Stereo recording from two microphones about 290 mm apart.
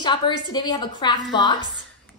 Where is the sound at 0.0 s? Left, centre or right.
Centre.